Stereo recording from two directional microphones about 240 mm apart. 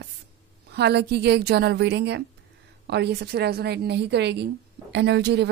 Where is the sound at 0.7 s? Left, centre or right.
Right.